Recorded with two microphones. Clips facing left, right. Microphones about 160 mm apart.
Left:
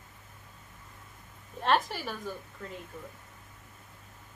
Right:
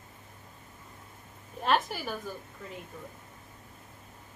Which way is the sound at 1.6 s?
Centre (ahead or behind).